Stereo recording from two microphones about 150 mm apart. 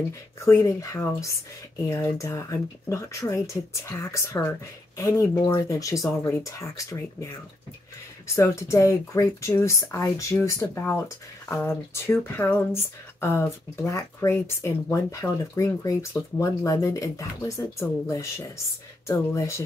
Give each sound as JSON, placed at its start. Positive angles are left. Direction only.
{"t": 0.5, "sound": "speech", "side_deg": 20}
{"t": 8.4, "sound": "speech", "side_deg": 20}